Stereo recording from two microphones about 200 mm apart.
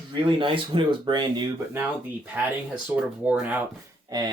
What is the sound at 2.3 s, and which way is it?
Speech, 5° right (ahead or behind).